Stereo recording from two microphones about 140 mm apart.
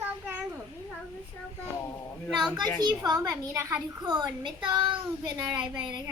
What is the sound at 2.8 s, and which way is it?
Speech, 30° right (ahead or behind).